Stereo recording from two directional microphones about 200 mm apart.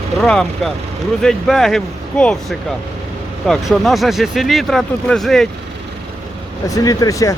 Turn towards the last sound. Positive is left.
turn(degrees=15)  # may be behind; listen again after turning